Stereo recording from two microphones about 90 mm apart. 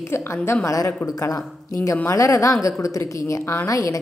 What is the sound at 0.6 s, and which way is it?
A woman's voice, 40° left (ahead or behind).